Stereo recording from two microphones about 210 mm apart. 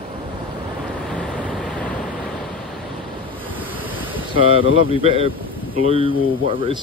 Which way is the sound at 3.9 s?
25° right (ahead or behind).